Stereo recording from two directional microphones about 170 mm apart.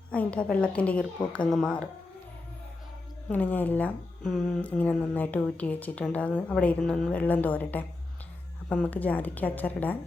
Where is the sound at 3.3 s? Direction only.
10° left (ahead or behind).